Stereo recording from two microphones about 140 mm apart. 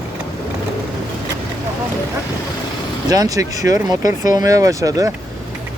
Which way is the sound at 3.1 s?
25° right (ahead or behind).